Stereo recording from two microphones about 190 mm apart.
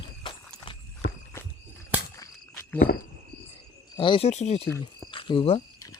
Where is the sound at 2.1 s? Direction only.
15° left (ahead or behind).